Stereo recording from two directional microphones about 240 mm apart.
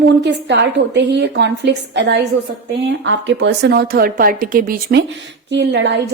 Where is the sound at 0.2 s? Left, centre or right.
Right.